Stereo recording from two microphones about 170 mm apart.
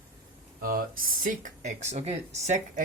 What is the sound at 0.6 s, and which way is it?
Speech, 55° right (ahead or behind).